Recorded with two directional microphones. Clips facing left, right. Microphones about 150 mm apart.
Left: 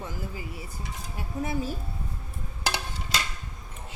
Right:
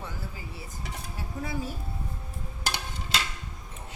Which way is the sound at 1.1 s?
20° left (ahead or behind).